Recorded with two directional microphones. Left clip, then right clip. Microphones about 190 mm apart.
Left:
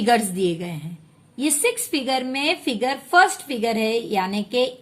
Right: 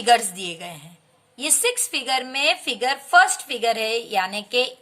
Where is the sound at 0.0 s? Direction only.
25° right (ahead or behind).